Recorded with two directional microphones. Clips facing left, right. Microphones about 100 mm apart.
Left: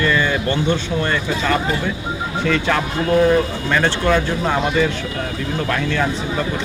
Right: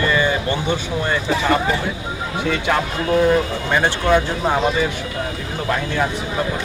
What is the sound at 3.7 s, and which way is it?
Speech, 15° right (ahead or behind).